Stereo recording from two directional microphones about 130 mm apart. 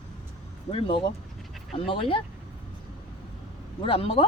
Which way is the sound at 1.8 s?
40° left (ahead or behind).